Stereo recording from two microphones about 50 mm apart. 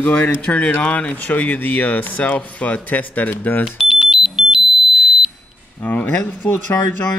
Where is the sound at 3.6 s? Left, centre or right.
Centre.